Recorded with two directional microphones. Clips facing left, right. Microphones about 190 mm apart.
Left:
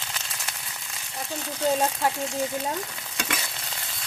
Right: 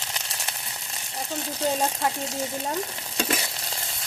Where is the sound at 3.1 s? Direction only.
35° right (ahead or behind).